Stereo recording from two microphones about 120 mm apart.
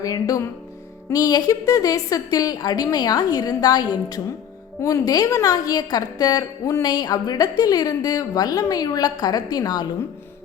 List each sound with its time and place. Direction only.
0.0 s a woman's voice: 30° left (ahead or behind)